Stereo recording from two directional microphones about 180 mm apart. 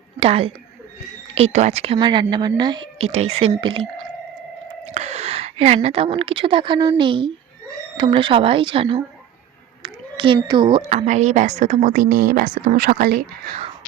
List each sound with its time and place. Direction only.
0.2 s a woman's voice: 30° right (ahead or behind)
2.0 s a woman's voice: 25° right (ahead or behind)
4.9 s a woman's voice: 40° right (ahead or behind); by 13.5 s 60° right (ahead or behind)